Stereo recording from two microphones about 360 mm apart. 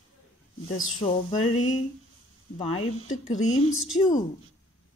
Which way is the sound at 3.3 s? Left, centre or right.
Left.